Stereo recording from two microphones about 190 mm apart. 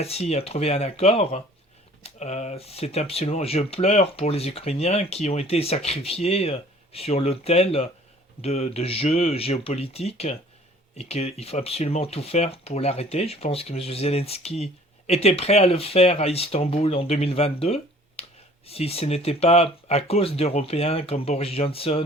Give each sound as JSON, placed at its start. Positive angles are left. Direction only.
{"t": 0.0, "sound": "speech", "side_deg": 35}